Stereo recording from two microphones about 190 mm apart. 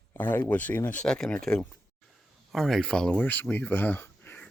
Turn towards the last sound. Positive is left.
turn(degrees=10)  # may be behind; listen again after turning